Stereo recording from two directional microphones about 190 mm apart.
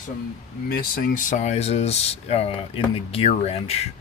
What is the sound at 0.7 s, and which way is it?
Speech, 50° left (ahead or behind).